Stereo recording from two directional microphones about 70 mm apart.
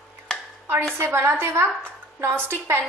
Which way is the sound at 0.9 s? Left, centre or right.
Right.